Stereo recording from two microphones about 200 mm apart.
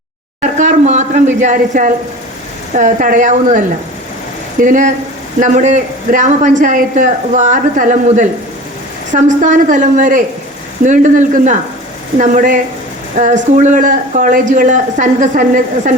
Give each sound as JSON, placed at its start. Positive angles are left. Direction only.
{"t": 0.6, "sound": "a sound", "side_deg": -35}
{"t": 1.4, "sound": "a woman's voice", "side_deg": -40}
{"t": 4.6, "sound": "a woman's voice", "side_deg": -40}